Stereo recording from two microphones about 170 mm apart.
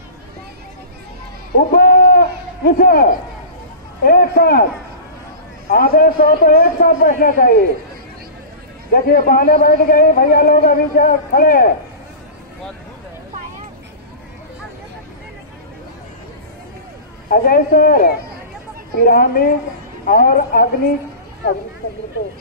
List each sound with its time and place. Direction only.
1.7 s a sound: 65° left (ahead or behind)
4.0 s a man's voice: 60° left (ahead or behind)
5.7 s a man's voice: 60° left (ahead or behind)
7.1 s a man's voice: 55° left (ahead or behind)
8.9 s a man's voice: 55° left (ahead or behind)
17.3 s a man's voice: 60° left (ahead or behind)